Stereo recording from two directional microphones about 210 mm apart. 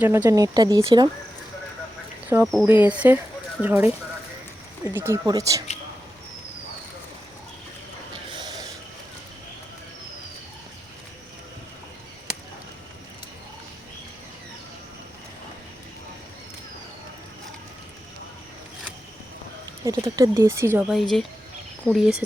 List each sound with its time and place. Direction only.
0.0 s speech: 10° right (ahead or behind)
2.2 s speech: 10° right (ahead or behind)
4.9 s speech: 15° right (ahead or behind)
8.4 s a sound: 20° right (ahead or behind)
19.8 s speech: 15° right (ahead or behind)